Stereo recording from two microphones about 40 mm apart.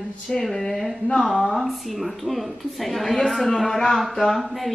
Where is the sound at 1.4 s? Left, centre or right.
Centre.